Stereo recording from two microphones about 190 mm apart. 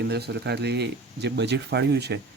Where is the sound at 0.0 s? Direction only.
60° right (ahead or behind).